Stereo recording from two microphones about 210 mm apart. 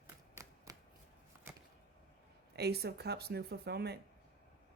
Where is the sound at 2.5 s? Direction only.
50° right (ahead or behind).